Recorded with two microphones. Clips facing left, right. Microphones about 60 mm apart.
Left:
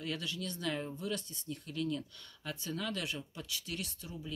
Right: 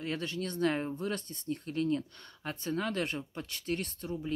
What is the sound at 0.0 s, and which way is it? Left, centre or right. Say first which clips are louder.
Speech: right 4 dB; right.